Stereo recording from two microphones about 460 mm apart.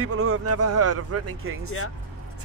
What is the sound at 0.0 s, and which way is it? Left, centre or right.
Speech, right.